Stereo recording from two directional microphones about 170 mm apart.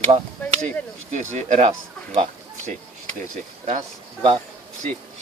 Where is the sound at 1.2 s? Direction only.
45° right (ahead or behind).